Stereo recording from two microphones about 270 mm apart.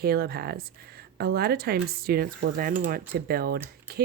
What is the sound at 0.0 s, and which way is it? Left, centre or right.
Speech, right.